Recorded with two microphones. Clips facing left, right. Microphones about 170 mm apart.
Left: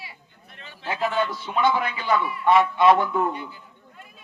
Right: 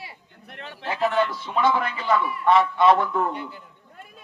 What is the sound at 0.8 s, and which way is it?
A woman's voice, 5° left (ahead or behind).